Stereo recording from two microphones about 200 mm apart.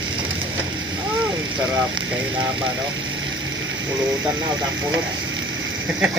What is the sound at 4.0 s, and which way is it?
Speech, 20° right (ahead or behind).